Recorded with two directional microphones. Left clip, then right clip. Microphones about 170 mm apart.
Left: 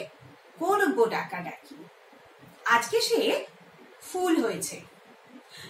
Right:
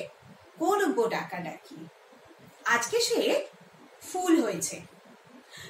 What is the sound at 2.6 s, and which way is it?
Speech, 15° right (ahead or behind).